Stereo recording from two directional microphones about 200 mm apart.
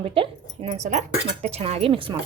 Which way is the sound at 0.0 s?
25° right (ahead or behind).